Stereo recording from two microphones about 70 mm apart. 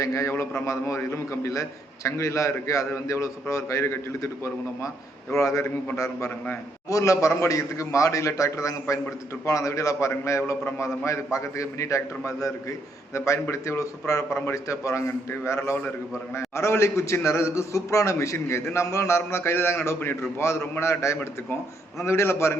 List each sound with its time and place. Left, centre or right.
0.0 s a man's voice: left